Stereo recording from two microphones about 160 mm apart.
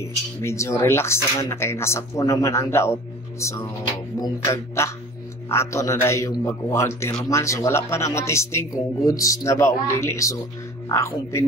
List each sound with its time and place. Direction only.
0.0 s speech: 15° left (ahead or behind)